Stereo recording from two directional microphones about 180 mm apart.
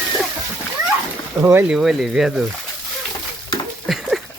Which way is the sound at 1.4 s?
15° right (ahead or behind).